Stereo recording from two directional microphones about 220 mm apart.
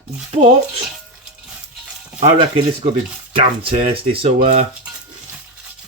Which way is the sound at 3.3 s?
25° right (ahead or behind).